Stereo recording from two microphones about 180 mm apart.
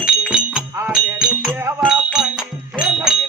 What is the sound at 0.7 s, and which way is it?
Music, 5° right (ahead or behind).